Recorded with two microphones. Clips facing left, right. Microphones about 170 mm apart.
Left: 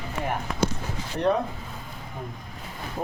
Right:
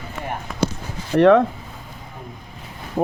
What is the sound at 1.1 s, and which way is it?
Speech, 90° right.